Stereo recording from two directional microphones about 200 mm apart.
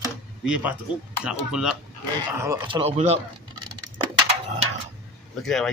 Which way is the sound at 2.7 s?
30° right (ahead or behind).